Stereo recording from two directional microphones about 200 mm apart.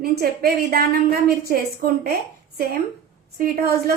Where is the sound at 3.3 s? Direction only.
50° right (ahead or behind).